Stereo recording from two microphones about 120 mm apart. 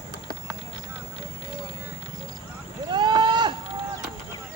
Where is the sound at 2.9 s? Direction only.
40° right (ahead or behind).